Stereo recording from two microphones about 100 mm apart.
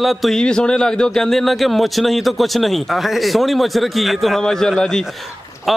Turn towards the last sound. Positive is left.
turn(degrees=5)  # may be behind; listen again after turning